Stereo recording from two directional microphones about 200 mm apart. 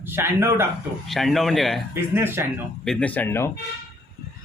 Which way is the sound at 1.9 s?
10° right (ahead or behind).